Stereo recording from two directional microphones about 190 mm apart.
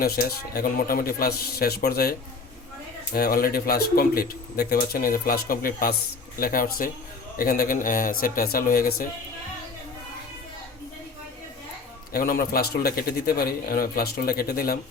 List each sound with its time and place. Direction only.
0.0 s speech: 55° left (ahead or behind)
3.2 s speech: 50° left (ahead or behind)
12.1 s speech: 50° left (ahead or behind)